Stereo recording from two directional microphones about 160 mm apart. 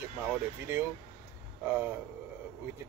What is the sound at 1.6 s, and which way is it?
Speech, 15° right (ahead or behind).